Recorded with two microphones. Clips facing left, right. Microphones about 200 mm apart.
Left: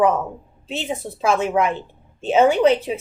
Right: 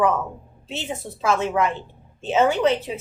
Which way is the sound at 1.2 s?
15° left (ahead or behind).